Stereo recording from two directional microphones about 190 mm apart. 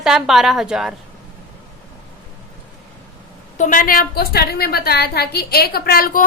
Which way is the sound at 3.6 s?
45° left (ahead or behind).